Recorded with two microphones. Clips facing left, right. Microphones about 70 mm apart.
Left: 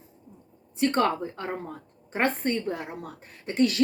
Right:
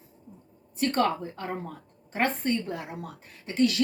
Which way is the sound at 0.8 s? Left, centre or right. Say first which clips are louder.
Left 2 dB; left.